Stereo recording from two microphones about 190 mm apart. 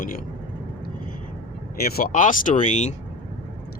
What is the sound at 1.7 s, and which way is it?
Speech, 50° left (ahead or behind).